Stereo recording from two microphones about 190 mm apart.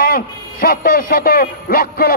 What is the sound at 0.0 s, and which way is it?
A man's voice, 50° left (ahead or behind).